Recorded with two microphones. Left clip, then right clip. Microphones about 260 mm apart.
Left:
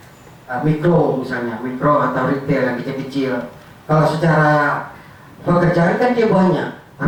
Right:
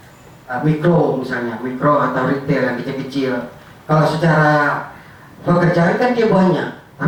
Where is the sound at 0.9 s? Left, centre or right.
Right.